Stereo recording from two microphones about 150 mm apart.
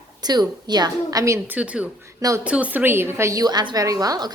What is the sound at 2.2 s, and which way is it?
Speech, 20° right (ahead or behind).